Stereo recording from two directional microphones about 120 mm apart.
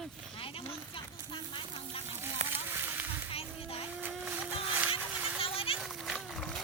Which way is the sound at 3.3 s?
55° left (ahead or behind).